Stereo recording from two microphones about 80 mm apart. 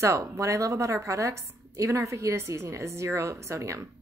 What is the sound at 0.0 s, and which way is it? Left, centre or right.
Speech, right.